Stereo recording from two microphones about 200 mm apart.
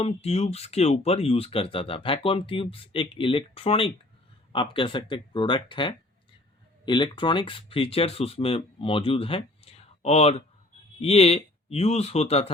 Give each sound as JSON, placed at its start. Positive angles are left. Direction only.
{"t": 0.0, "sound": "speech", "side_deg": 30}